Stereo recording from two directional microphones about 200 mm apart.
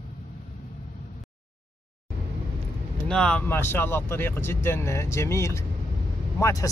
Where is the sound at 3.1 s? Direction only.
5° left (ahead or behind).